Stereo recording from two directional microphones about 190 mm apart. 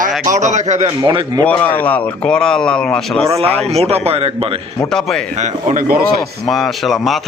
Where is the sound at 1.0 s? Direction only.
25° right (ahead or behind).